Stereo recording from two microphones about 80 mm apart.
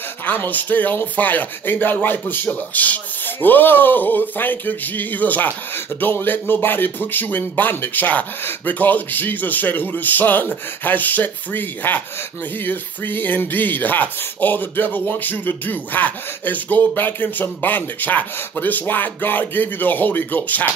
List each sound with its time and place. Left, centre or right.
0.3 s speech: left